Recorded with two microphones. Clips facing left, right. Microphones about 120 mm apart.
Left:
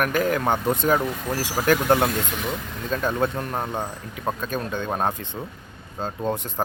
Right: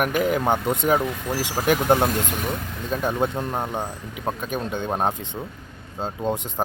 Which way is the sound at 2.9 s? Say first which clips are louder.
Even; 15° right (ahead or behind).